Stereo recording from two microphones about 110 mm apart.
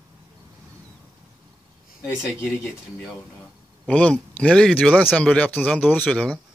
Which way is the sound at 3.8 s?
10° left (ahead or behind).